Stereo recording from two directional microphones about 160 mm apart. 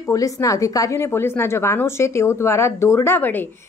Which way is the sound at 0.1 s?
20° left (ahead or behind).